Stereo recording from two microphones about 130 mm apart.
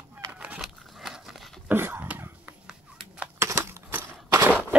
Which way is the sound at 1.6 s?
15° right (ahead or behind).